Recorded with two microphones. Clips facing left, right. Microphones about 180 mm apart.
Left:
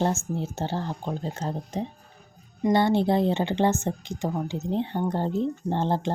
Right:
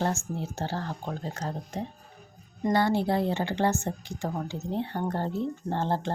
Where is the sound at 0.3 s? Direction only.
20° left (ahead or behind).